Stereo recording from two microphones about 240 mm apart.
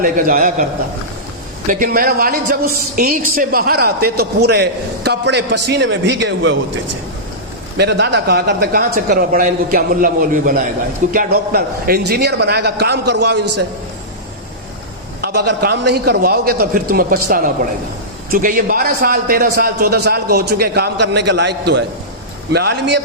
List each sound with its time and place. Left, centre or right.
0.0 s a man's voice: right
1.6 s a man's voice: right
7.8 s a man's voice: right
15.4 s a man's voice: right